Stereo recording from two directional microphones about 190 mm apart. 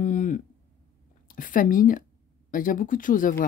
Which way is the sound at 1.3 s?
45° left (ahead or behind).